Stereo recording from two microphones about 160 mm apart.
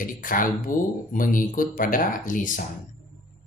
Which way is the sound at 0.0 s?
60° left (ahead or behind).